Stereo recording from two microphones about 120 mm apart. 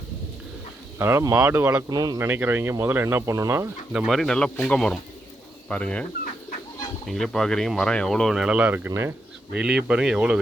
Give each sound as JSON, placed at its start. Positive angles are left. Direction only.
{"t": 0.9, "sound": "speech", "side_deg": -20}
{"t": 1.9, "sound": "speech", "side_deg": -30}
{"t": 2.2, "sound": "speech", "side_deg": -15}
{"t": 4.1, "sound": "speech", "side_deg": 5}
{"t": 7.1, "sound": "speech", "side_deg": 5}
{"t": 9.5, "sound": "speech", "side_deg": -5}